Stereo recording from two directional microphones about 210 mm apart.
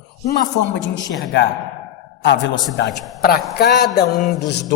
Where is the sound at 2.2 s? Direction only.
55° left (ahead or behind).